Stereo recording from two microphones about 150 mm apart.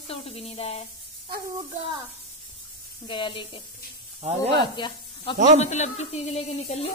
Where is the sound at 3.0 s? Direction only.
35° left (ahead or behind).